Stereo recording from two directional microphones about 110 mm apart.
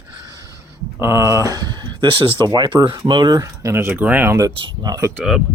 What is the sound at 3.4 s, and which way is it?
Speech, 25° right (ahead or behind).